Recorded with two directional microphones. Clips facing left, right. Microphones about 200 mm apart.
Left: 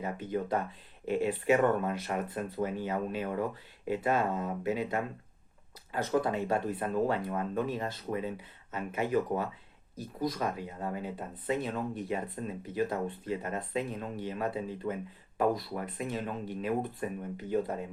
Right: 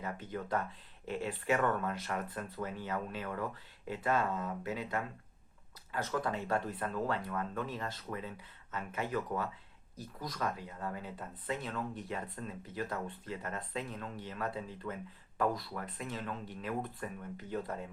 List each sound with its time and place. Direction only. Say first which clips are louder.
0.0 s speech: left 7 dB; 20° left (ahead or behind)
6.1 s speech: left 6 dB; 15° left (ahead or behind)
8.1 s speech: left 9 dB; 30° left (ahead or behind)
8.7 s speech: left 7 dB; 15° left (ahead or behind)